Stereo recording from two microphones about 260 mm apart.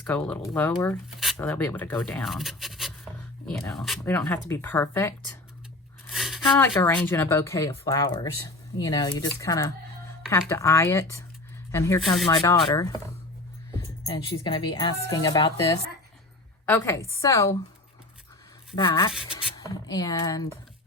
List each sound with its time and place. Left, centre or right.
0.0 s speech: centre
6.1 s a sound: centre
6.4 s speech: centre
14.0 s speech: centre
18.8 s speech: centre